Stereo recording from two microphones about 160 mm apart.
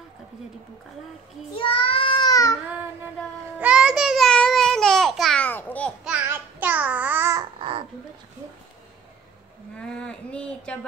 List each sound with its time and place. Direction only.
1.5 s child singing: 35° left (ahead or behind)
3.5 s babbling: 5° right (ahead or behind); by 5.9 s 10° left (ahead or behind)
6.0 s babbling: 10° right (ahead or behind)
9.8 s speech: 5° left (ahead or behind)